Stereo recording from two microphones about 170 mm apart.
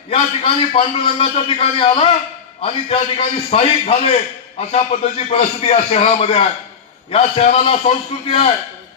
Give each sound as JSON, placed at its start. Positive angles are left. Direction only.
{"t": 0.1, "sound": "a man's voice", "side_deg": 35}